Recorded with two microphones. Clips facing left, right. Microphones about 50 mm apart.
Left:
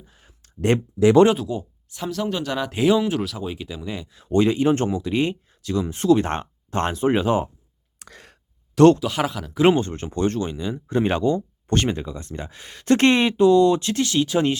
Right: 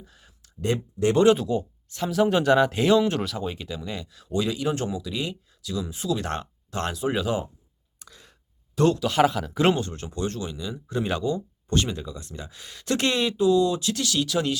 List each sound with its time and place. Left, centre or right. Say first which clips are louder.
0.0 s a sound: right 1 dB; left
1.3 s speech: right 2 dB; centre
2.0 s speech: right 5 dB; centre
2.7 s speech: left 1 dB; centre; by 4.3 s left
4.3 s speech: left 7 dB; left
6.1 s speech: left 6 dB; left
7.9 s a sound: left 5 dB; left
9.0 s speech: right 3 dB; centre
9.7 s speech: left 6 dB; left